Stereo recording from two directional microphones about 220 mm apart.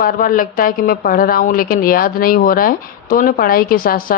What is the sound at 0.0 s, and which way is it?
A woman's voice, 40° left (ahead or behind).